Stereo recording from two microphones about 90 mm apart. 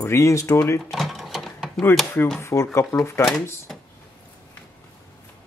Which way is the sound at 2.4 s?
35° left (ahead or behind).